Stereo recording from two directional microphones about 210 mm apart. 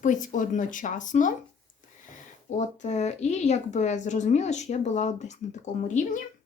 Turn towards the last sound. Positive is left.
turn(degrees=40)  # may be behind; listen again after turning